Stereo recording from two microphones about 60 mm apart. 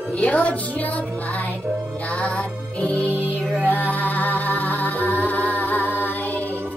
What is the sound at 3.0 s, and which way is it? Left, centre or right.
Music, right.